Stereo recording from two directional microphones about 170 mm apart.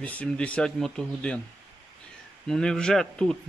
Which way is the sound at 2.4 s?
5° left (ahead or behind).